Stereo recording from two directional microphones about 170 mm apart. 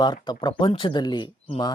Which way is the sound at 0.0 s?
25° left (ahead or behind).